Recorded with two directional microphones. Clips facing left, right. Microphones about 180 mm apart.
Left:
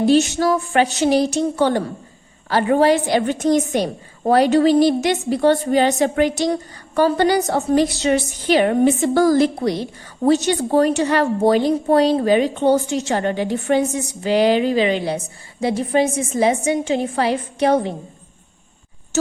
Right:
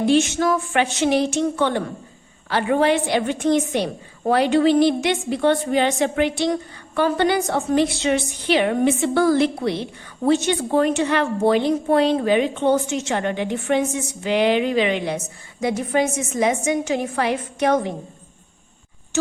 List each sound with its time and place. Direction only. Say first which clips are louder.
0.0 s a woman's voice: left 2 dB; 35° left (ahead or behind)
19.1 s speech: left 2 dB; 40° left (ahead or behind)